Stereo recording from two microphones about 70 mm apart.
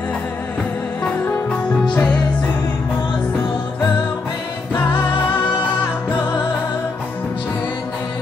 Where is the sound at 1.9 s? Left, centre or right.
Left.